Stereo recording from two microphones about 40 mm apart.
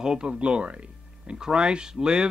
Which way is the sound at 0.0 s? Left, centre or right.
Right.